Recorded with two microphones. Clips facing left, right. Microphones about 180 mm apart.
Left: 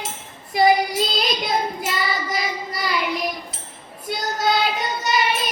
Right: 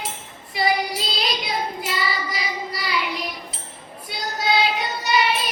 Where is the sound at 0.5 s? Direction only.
45° left (ahead or behind).